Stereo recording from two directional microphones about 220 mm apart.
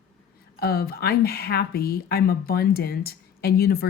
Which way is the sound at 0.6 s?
45° left (ahead or behind).